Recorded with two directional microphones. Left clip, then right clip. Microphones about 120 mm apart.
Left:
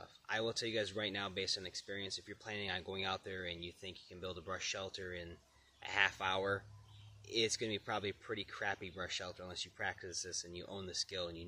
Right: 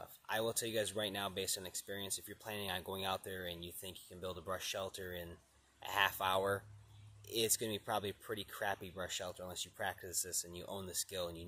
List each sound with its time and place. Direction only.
0.0 s speech: 20° left (ahead or behind)